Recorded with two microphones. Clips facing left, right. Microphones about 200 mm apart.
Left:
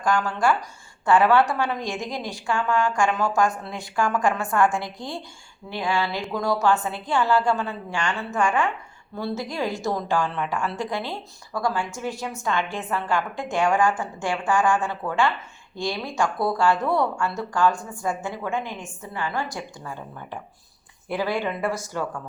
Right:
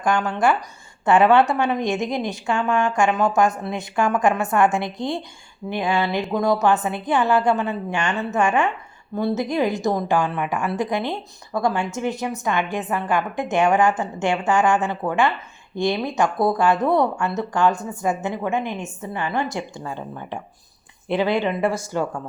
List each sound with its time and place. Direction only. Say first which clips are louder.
0.0 s speech: right 2 dB; 20° right (ahead or behind)